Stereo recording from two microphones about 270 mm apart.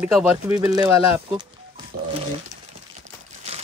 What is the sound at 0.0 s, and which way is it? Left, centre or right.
Speech, centre.